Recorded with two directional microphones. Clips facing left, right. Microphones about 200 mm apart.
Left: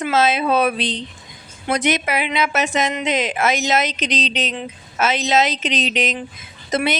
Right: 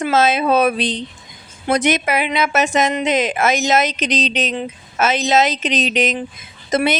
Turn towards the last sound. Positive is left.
turn(degrees=-45)  # may be behind; listen again after turning